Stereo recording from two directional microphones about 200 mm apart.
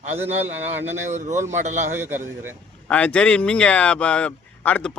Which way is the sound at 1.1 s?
35° right (ahead or behind).